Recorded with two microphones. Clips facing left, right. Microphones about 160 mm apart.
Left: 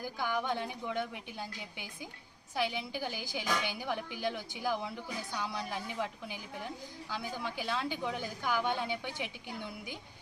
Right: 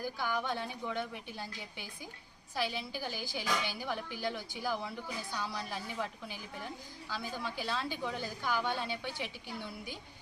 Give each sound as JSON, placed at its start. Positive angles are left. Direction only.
{"t": 0.0, "sound": "speech", "side_deg": 15}